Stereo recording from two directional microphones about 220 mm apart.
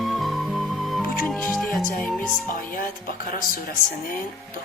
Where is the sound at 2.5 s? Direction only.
40° left (ahead or behind).